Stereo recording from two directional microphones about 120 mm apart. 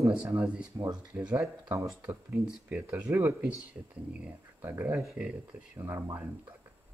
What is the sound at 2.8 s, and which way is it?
Speech, 25° right (ahead or behind).